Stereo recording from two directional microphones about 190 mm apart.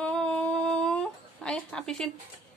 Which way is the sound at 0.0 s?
5° left (ahead or behind).